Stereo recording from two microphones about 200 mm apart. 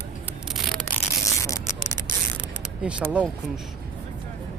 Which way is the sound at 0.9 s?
15° left (ahead or behind).